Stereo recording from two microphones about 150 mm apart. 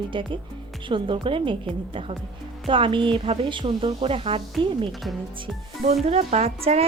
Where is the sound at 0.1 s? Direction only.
35° right (ahead or behind).